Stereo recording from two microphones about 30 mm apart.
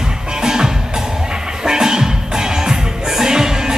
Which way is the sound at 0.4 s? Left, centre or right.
Centre.